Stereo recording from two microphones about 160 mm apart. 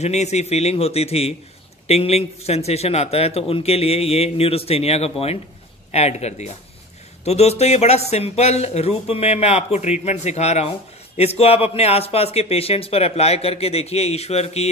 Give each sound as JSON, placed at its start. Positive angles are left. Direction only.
{"t": 0.0, "sound": "a man's voice", "side_deg": 45}